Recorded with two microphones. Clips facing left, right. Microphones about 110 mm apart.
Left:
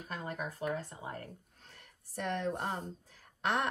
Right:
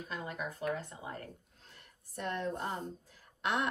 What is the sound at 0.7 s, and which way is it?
Speech, 35° left (ahead or behind).